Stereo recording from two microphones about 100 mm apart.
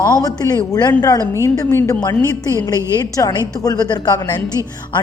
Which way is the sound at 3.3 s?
40° left (ahead or behind).